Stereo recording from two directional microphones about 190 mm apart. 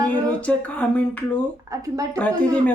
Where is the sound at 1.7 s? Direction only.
15° right (ahead or behind).